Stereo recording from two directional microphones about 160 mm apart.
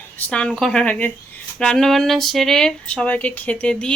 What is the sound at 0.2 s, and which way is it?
A woman's voice, 5° left (ahead or behind).